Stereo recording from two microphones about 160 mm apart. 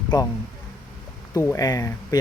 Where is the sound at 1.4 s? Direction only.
20° left (ahead or behind).